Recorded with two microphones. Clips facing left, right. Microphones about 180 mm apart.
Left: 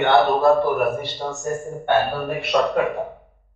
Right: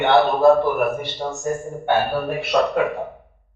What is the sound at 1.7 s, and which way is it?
A man's voice, centre (ahead or behind).